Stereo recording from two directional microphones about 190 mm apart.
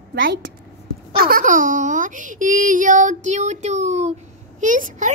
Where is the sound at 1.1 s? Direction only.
50° right (ahead or behind).